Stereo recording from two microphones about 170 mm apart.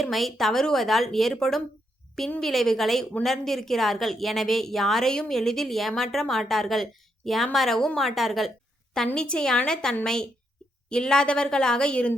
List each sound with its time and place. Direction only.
0.0 s a woman's voice: centre (ahead or behind)